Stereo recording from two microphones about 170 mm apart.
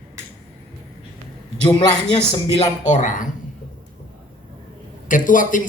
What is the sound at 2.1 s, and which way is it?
A man's voice, 35° left (ahead or behind).